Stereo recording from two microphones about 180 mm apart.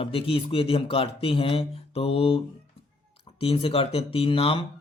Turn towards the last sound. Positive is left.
turn(degrees=30)  # may be behind; listen again after turning